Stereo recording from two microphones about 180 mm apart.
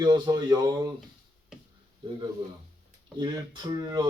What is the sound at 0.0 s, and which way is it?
Speech, 20° right (ahead or behind).